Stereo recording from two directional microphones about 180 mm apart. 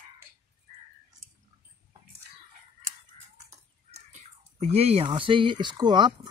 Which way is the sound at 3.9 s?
35° right (ahead or behind).